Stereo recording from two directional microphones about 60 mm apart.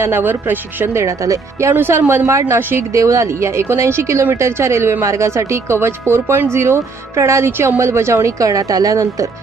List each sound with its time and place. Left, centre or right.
0.0 s a man's voice: right
0.9 s speech: right
1.7 s speech: right
2.6 s a man's voice: right
2.9 s speech: right
8.4 s speech: right